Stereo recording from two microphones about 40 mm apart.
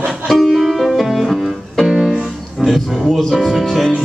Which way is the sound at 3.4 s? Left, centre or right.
Centre.